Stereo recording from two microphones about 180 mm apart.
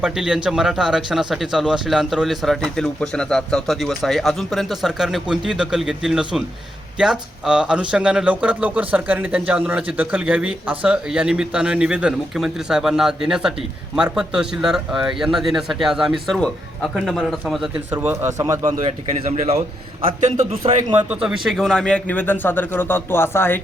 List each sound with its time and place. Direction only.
0.0 s speech: 5° right (ahead or behind)
18.9 s speech: 35° right (ahead or behind)
21.1 s speech: 5° right (ahead or behind); by 23.6 s 15° left (ahead or behind)